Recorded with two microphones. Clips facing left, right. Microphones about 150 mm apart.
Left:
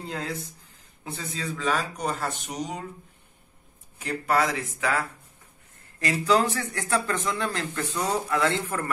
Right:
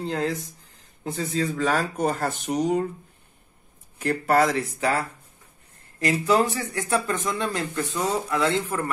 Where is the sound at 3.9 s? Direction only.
50° right (ahead or behind); by 5.1 s 35° right (ahead or behind).